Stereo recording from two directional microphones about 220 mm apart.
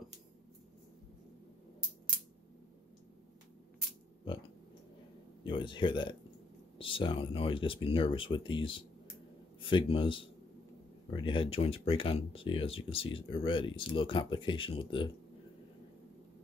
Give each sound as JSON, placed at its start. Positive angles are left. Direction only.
{"t": 5.4, "sound": "speech", "side_deg": 20}